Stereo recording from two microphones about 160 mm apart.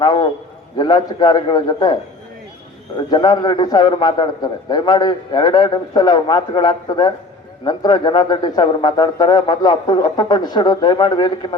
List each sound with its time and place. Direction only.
0.0 s a man's voice: 30° left (ahead or behind)
3.1 s a man's voice: 25° left (ahead or behind)